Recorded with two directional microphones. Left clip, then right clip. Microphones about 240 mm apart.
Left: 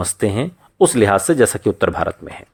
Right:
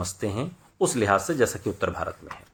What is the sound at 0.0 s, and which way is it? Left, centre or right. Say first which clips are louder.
Speech: left 10 dB; left.